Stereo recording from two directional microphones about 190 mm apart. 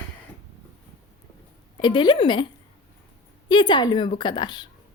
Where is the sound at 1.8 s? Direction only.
25° left (ahead or behind).